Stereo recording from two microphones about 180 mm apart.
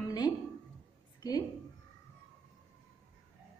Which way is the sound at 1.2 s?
20° left (ahead or behind).